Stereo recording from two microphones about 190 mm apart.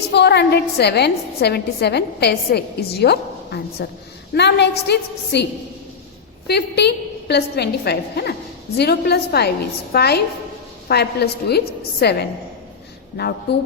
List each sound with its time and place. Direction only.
0.1 s a woman's voice: 65° left (ahead or behind)
6.5 s a woman's voice: 60° left (ahead or behind)
13.1 s a woman's voice: 55° left (ahead or behind)